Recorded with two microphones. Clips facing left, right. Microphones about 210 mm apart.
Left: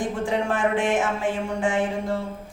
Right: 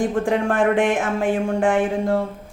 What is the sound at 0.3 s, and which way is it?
Speech, 55° right (ahead or behind).